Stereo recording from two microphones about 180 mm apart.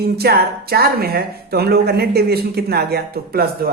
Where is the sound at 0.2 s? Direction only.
60° right (ahead or behind).